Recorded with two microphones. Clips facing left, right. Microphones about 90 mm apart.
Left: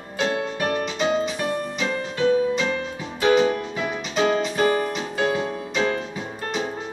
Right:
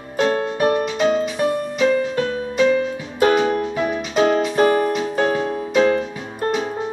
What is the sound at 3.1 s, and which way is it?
Music, 45° right (ahead or behind).